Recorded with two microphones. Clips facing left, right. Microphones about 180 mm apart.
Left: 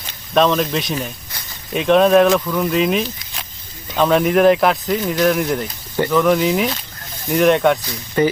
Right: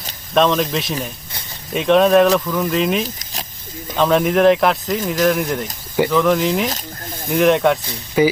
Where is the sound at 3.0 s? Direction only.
40° right (ahead or behind).